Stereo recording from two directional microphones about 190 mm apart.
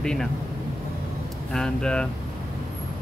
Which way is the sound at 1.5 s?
5° left (ahead or behind).